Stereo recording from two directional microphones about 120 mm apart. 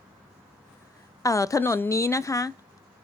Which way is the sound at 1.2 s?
25° left (ahead or behind).